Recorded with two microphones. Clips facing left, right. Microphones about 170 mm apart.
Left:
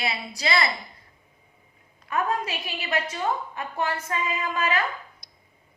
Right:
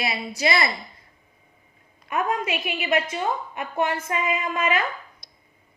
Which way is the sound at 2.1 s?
20° right (ahead or behind).